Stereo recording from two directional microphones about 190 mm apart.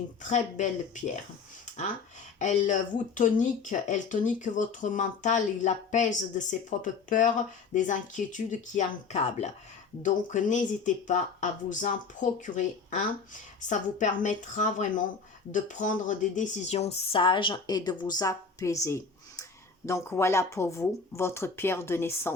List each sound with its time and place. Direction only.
0.2 s speech: 40° left (ahead or behind)
2.4 s speech: 40° left (ahead or behind); by 22.4 s 10° left (ahead or behind)